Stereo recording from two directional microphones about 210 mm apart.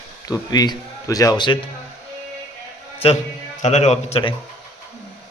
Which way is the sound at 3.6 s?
35° left (ahead or behind).